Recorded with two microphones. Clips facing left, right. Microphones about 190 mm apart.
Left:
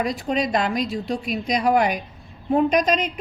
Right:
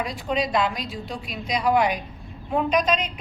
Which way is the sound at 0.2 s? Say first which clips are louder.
Left 1 dB; 45° left (ahead or behind).